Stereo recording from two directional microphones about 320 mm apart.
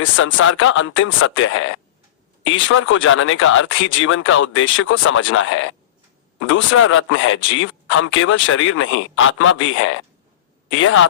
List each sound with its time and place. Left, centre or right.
0.0 s speech: left